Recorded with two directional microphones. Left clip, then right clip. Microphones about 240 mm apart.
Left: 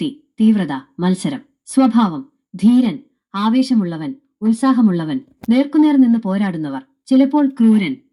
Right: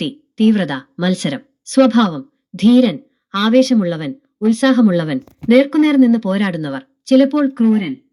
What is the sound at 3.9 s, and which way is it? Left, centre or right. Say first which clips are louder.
Speech: right 4 dB; right.